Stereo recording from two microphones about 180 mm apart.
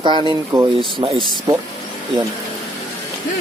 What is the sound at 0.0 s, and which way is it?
Speech, 25° right (ahead or behind).